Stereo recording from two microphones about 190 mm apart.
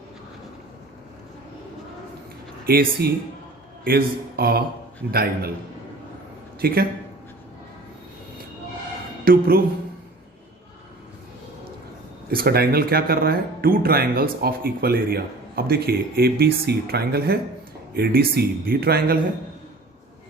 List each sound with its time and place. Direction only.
2.6 s speech: 55° right (ahead or behind)
6.6 s speech: 50° right (ahead or behind)
9.2 s a woman's voice: 50° right (ahead or behind)
12.3 s speech: 55° right (ahead or behind)